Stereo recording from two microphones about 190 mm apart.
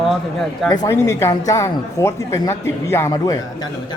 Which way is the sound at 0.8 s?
15° left (ahead or behind).